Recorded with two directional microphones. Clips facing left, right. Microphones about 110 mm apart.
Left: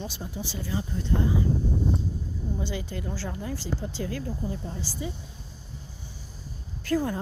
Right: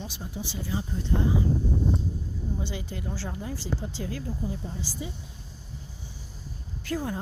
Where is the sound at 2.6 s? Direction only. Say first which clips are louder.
Left 2 dB; 20° right (ahead or behind).